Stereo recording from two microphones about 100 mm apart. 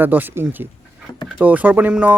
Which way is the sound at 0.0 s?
20° right (ahead or behind).